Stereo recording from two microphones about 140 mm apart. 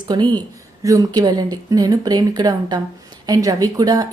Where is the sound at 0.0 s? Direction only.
30° right (ahead or behind).